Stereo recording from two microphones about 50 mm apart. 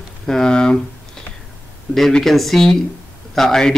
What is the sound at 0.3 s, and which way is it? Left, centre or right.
Speech, centre.